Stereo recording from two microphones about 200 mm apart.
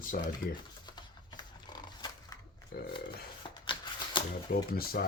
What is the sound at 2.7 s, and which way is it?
Speech, 50° left (ahead or behind).